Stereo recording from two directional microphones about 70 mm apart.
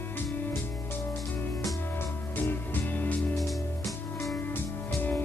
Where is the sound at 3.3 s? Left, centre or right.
Centre.